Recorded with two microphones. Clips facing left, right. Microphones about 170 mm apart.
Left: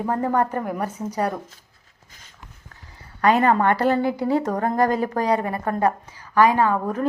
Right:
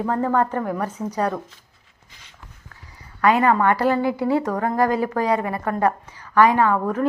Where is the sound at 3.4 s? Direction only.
35° left (ahead or behind).